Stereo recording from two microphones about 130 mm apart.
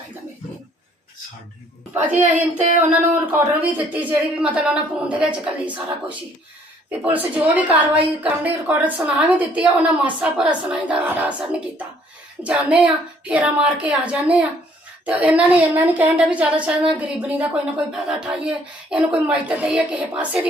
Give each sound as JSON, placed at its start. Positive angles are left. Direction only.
{"t": 1.9, "sound": "a woman's voice", "side_deg": -20}
{"t": 2.2, "sound": "speech", "side_deg": -70}
{"t": 4.0, "sound": "a woman's voice", "side_deg": -10}